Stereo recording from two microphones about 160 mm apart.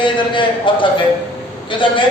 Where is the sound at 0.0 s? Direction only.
30° left (ahead or behind).